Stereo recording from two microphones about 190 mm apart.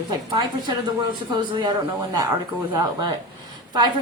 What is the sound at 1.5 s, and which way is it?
Speech, 25° right (ahead or behind).